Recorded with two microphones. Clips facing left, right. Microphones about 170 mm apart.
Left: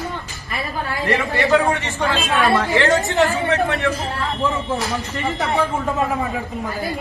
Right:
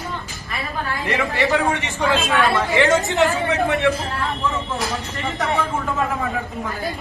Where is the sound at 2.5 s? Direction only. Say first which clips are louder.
Even; 20° right (ahead or behind).